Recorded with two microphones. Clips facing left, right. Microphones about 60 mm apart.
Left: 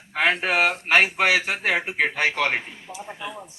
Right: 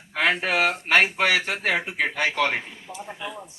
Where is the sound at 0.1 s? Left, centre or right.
Centre.